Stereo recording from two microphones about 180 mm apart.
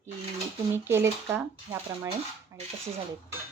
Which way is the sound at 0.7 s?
15° right (ahead or behind).